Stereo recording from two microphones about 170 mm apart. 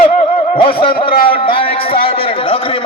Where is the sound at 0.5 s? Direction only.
30° left (ahead or behind).